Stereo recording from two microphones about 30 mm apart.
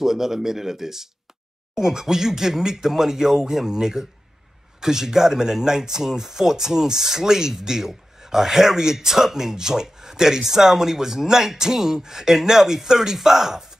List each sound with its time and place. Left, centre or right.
0.0 s speech: centre